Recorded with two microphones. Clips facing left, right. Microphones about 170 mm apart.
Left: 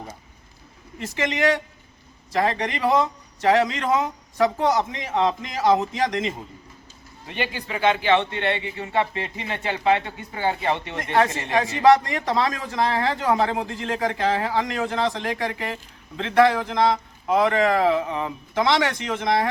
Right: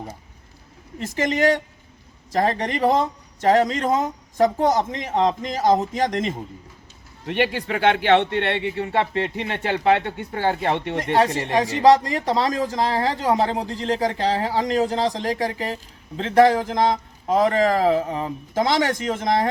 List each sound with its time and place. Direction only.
0.9 s speech: 40° right (ahead or behind)
7.3 s speech: 70° right (ahead or behind)
10.9 s speech: 35° right (ahead or behind)